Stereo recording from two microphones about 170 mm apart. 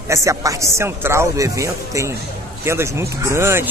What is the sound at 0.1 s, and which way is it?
Speech, 20° right (ahead or behind).